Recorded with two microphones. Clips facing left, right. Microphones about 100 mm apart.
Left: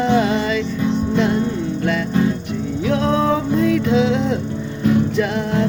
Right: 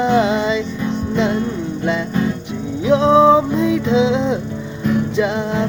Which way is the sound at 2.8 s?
20° right (ahead or behind).